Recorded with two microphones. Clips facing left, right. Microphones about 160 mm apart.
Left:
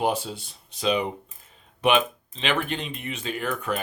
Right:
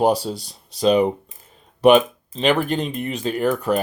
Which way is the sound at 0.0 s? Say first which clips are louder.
Right 7 dB; 35° right (ahead or behind).